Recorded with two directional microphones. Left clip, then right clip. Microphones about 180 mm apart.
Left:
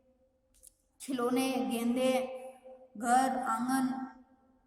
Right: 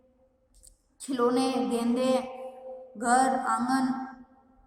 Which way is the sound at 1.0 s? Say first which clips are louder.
Right 6 dB; 45° left (ahead or behind).